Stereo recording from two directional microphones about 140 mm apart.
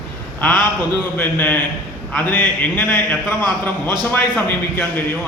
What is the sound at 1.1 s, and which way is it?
A man's voice, 15° left (ahead or behind).